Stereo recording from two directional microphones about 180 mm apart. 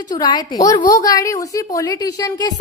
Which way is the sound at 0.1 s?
25° left (ahead or behind).